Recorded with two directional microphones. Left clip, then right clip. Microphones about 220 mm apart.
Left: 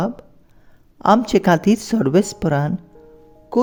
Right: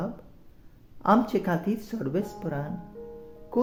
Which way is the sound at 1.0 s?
40° left (ahead or behind).